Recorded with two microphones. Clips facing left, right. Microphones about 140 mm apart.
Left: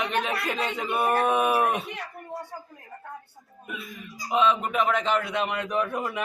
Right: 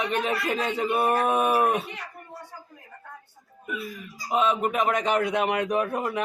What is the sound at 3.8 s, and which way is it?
Speech, 10° right (ahead or behind).